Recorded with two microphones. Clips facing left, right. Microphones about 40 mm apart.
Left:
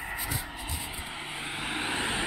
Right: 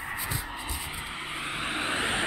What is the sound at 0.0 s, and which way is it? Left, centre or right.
Vehicle, centre.